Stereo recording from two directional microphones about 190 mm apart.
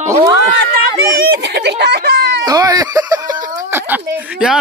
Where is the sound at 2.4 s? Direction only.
20° right (ahead or behind).